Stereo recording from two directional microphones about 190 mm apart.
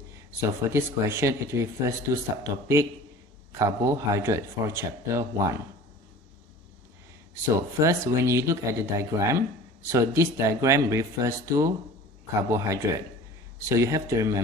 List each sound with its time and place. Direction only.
0.4 s speech: 15° right (ahead or behind)
7.5 s speech: 15° right (ahead or behind)